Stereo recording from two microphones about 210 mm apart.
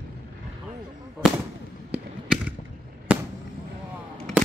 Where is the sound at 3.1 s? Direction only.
5° right (ahead or behind).